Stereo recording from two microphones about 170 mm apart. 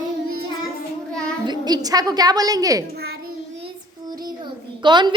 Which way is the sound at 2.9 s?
70° right (ahead or behind).